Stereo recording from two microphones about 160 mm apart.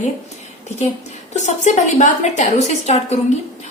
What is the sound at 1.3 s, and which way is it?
A woman's voice, 50° left (ahead or behind).